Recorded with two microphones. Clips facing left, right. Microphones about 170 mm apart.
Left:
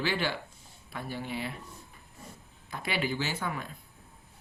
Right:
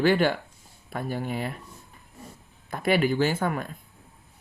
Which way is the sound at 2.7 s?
50° right (ahead or behind).